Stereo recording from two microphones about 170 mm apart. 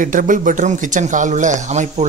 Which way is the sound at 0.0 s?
50° right (ahead or behind).